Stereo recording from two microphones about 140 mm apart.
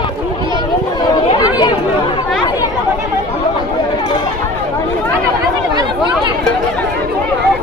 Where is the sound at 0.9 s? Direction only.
30° left (ahead or behind).